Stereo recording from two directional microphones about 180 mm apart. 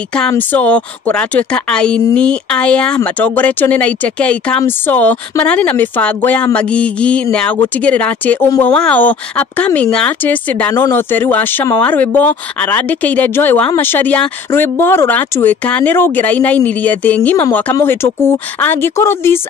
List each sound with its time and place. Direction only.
0.3 s speech: 10° left (ahead or behind)